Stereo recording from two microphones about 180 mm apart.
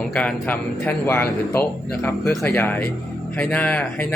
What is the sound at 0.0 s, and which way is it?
A man's voice, 5° left (ahead or behind).